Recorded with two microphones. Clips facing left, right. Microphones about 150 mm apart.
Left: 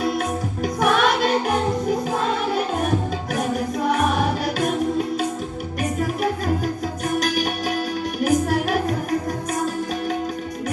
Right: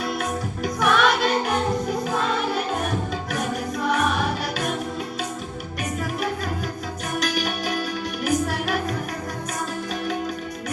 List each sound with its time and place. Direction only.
0.0 s music: 50° left (ahead or behind)
7.2 s music: 50° left (ahead or behind)